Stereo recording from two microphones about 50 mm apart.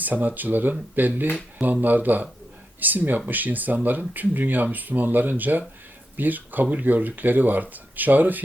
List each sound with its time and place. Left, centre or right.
0.0 s speech: right